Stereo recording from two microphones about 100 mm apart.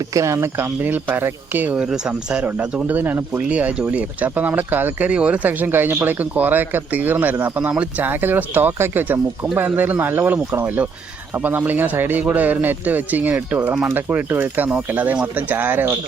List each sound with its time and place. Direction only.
0.1 s speech: 30° right (ahead or behind)